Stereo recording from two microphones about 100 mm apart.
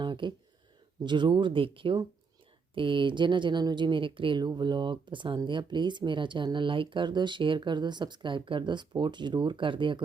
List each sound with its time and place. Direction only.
0.0 s speech: 50° right (ahead or behind)